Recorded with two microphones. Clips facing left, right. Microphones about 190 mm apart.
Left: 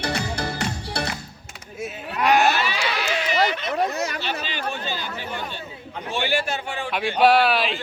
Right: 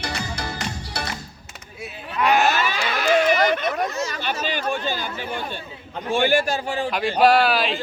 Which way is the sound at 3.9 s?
60° left (ahead or behind).